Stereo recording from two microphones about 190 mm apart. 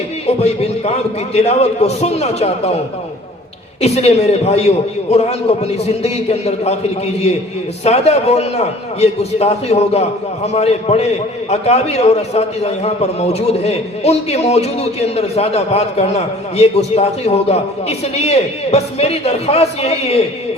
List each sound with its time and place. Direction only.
0.3 s a man's voice: 35° left (ahead or behind)
3.8 s a man's voice: 35° left (ahead or behind)
7.9 s a man's voice: 35° left (ahead or behind)